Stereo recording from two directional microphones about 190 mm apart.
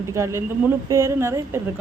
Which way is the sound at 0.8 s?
15° right (ahead or behind).